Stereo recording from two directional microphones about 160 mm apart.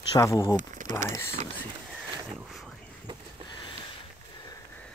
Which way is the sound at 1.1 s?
15° left (ahead or behind).